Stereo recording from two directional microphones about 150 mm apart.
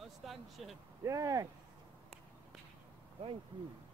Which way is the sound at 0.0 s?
Centre (ahead or behind).